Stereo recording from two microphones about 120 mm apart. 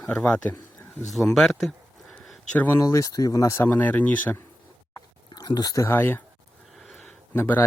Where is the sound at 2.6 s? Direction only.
15° left (ahead or behind).